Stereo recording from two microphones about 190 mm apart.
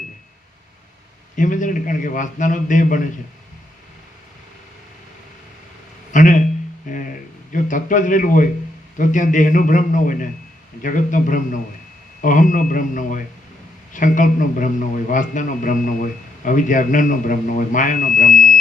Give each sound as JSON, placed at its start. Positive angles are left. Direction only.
{"t": 1.4, "sound": "a man's voice", "side_deg": 45}
{"t": 6.1, "sound": "a sound", "side_deg": 45}
{"t": 7.5, "sound": "a man's voice", "side_deg": 45}